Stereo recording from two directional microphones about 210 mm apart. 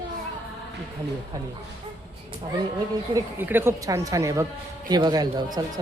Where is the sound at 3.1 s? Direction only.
10° right (ahead or behind).